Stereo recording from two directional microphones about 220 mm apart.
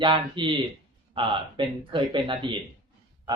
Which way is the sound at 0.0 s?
20° right (ahead or behind).